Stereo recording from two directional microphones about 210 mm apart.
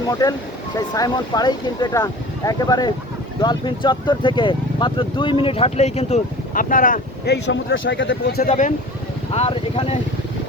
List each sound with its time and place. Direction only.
0.1 s speech: 15° left (ahead or behind); by 7.3 s 40° left (ahead or behind)
7.5 s speech: 60° left (ahead or behind)
8.4 s speech: 35° left (ahead or behind)